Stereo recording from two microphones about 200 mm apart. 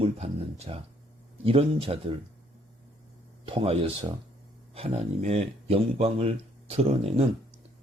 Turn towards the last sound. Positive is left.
turn(degrees=-30)  # may be behind; listen again after turning